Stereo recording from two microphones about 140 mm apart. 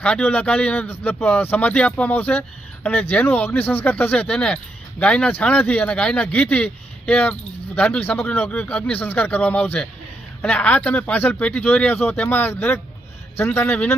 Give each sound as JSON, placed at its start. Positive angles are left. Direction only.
{"t": 0.0, "sound": "speech", "side_deg": 10}